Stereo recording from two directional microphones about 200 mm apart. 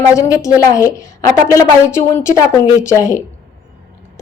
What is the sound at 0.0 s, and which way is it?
A woman's voice, 15° left (ahead or behind).